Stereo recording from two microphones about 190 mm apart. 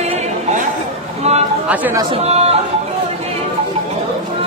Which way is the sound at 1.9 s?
30° right (ahead or behind).